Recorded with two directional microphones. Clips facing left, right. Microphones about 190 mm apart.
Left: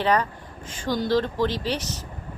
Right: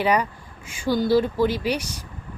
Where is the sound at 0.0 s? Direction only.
10° right (ahead or behind).